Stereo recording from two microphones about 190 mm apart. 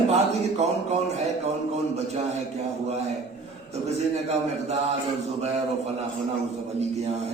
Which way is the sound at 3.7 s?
35° right (ahead or behind).